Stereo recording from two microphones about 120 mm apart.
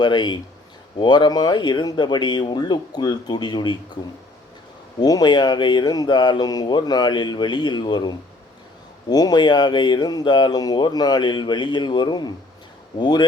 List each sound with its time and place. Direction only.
0.0 s speech: 40° left (ahead or behind)
4.9 s speech: 35° left (ahead or behind)